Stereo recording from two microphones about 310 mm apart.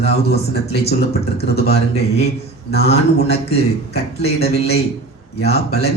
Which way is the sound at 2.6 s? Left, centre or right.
Left.